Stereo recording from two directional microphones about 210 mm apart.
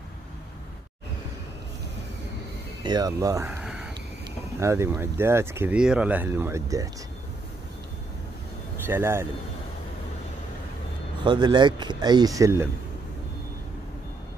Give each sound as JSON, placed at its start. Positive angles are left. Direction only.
{"t": 2.8, "sound": "speech", "side_deg": -20}
{"t": 4.6, "sound": "speech", "side_deg": -15}
{"t": 8.8, "sound": "speech", "side_deg": -10}
{"t": 11.2, "sound": "speech", "side_deg": -20}